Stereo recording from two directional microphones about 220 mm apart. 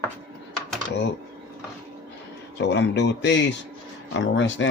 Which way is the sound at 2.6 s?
50° left (ahead or behind).